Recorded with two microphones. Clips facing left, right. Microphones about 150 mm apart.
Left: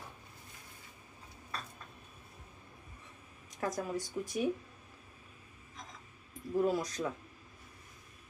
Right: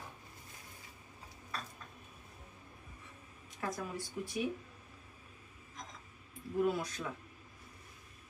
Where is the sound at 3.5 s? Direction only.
40° left (ahead or behind).